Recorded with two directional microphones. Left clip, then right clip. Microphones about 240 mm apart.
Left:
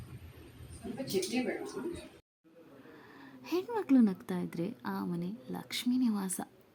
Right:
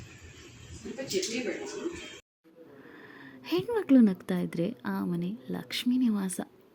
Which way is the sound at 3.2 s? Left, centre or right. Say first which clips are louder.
Right 4 dB; centre.